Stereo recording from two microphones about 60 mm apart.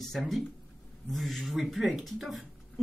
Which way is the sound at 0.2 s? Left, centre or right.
Centre.